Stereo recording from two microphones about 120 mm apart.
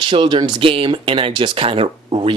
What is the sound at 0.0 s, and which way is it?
Speech, 45° right (ahead or behind).